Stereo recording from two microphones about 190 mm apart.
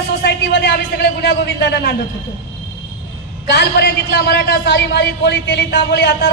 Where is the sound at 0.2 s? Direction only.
60° left (ahead or behind).